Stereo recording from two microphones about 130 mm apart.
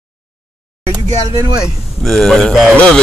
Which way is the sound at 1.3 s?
35° right (ahead or behind).